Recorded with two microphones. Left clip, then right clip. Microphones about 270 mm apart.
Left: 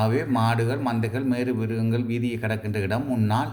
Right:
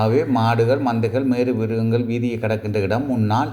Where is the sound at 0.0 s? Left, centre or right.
Centre.